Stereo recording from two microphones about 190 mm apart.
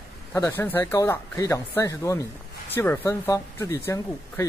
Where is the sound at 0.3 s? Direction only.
10° left (ahead or behind).